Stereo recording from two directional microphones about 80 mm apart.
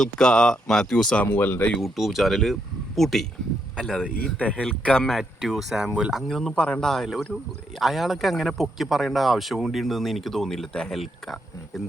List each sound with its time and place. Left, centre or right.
0.0 s speech: centre
1.1 s speech: centre
1.8 s speech: centre
4.2 s speech: centre
6.2 s speech: centre